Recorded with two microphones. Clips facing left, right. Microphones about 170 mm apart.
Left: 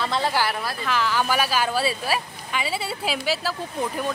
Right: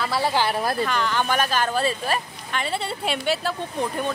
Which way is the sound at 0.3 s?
20° right (ahead or behind).